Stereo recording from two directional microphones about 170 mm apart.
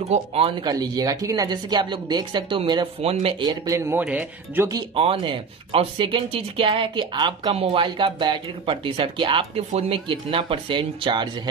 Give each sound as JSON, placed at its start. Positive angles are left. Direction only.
{"t": 0.1, "sound": "speech", "side_deg": -35}
{"t": 0.7, "sound": "speech", "side_deg": -20}
{"t": 4.7, "sound": "speech", "side_deg": -35}